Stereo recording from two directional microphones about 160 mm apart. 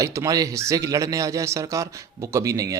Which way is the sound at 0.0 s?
20° right (ahead or behind).